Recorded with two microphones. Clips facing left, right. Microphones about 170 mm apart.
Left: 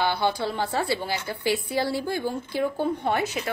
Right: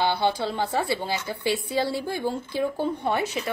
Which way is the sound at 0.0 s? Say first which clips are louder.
Right 1 dB; 20° right (ahead or behind).